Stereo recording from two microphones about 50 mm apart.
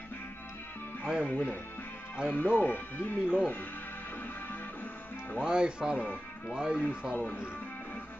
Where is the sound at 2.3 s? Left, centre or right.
Left.